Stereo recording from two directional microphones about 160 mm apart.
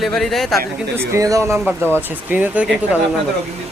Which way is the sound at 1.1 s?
20° right (ahead or behind).